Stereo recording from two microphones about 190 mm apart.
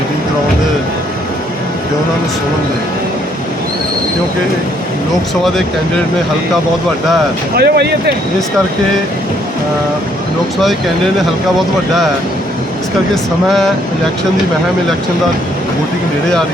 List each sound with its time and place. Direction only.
7.5 s speech: 60° right (ahead or behind)